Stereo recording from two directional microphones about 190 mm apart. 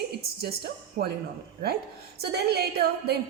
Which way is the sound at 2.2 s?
55° right (ahead or behind).